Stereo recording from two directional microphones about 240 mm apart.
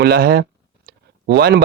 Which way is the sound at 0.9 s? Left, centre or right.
Right.